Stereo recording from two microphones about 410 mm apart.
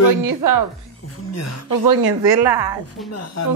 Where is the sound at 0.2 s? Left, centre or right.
Right.